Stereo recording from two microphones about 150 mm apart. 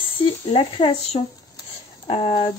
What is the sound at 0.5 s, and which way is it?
Speech, 40° left (ahead or behind).